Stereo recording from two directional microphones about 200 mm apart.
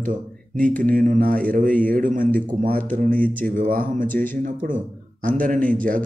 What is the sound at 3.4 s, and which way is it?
A man's voice, 40° right (ahead or behind).